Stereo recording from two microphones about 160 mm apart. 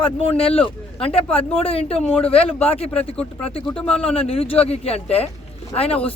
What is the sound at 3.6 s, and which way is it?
Speech, 5° left (ahead or behind).